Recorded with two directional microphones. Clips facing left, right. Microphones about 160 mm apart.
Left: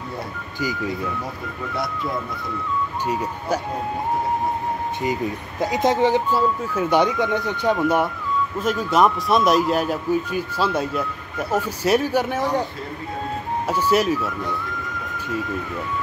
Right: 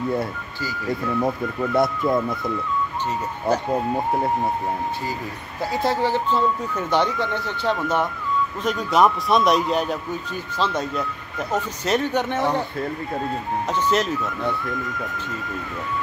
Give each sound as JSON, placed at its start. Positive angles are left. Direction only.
{"t": 3.1, "sound": "speech", "side_deg": 10}
{"t": 5.6, "sound": "speech", "side_deg": 20}
{"t": 13.7, "sound": "speech", "side_deg": 10}